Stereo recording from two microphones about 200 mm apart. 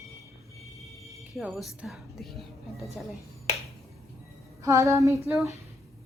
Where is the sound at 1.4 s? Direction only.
Centre (ahead or behind).